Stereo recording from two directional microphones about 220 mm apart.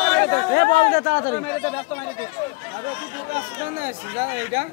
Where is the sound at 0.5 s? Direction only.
35° left (ahead or behind).